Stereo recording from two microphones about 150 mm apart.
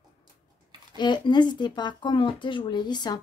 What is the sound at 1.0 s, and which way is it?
Speech, 30° left (ahead or behind).